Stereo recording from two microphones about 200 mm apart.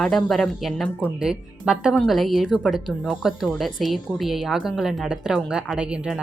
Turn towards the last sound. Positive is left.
turn(degrees=-5)  # may be behind; listen again after turning